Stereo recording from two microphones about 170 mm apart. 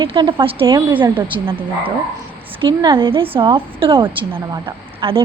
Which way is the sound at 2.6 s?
25° right (ahead or behind).